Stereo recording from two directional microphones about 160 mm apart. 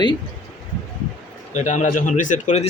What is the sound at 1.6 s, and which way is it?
A man's voice, 50° left (ahead or behind).